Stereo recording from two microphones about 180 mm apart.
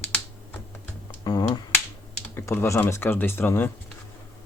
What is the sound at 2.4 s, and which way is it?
Speech, 15° left (ahead or behind).